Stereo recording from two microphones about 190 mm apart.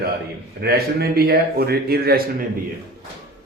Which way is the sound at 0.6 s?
55° right (ahead or behind).